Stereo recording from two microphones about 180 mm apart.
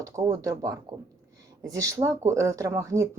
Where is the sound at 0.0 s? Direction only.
20° right (ahead or behind).